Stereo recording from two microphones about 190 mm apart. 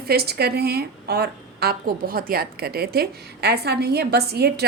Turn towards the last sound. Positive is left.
turn(degrees=-60)  # may be behind; listen again after turning